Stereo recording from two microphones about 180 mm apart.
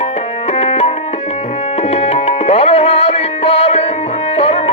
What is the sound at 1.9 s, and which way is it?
Tabla, 35° left (ahead or behind).